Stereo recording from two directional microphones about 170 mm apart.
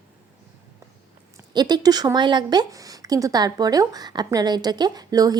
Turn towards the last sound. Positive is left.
turn(degrees=-20)  # may be behind; listen again after turning